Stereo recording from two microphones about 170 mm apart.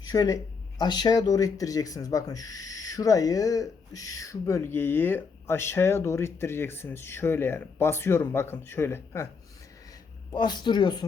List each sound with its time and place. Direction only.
0.1 s speech: 20° left (ahead or behind)
10.3 s speech: 25° left (ahead or behind)